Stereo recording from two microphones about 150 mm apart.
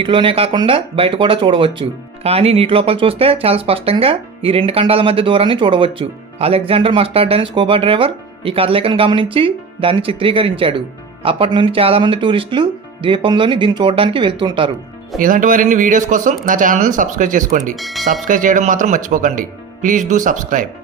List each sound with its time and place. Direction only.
0.0 s speech: 35° right (ahead or behind)
15.2 s speech: 65° right (ahead or behind)
17.7 s speech: centre (ahead or behind)
18.3 s speech: 60° right (ahead or behind)